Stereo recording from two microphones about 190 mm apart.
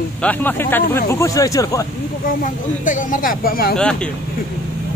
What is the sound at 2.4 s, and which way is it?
Speech, 45° left (ahead or behind).